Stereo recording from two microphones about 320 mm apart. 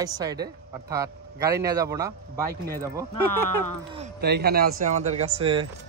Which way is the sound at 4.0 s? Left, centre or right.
Right.